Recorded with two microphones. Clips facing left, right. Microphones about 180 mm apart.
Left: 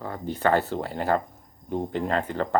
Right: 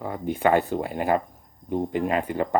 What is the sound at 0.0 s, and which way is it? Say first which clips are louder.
Speech: right 2 dB; 15° right (ahead or behind).